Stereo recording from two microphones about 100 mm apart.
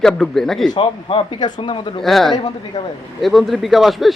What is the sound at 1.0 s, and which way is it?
Speech, 65° left (ahead or behind).